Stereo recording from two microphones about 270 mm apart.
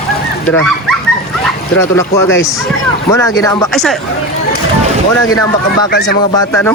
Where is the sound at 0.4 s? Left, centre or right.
Centre.